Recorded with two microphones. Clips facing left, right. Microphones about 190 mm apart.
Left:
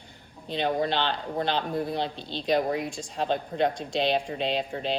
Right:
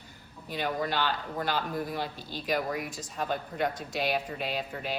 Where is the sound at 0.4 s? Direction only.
25° left (ahead or behind).